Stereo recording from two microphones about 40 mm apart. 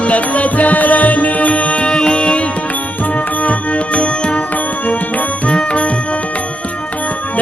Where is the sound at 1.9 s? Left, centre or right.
Left.